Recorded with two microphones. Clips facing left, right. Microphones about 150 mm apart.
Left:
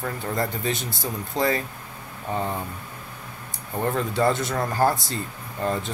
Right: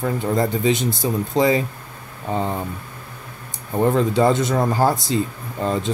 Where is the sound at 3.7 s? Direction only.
20° right (ahead or behind).